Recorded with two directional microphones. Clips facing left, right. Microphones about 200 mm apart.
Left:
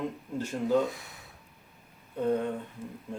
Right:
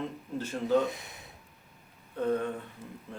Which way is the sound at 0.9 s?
20° right (ahead or behind).